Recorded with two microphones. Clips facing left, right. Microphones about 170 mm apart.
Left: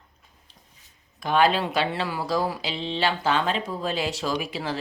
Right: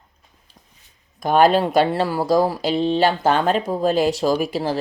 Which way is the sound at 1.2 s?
45° right (ahead or behind).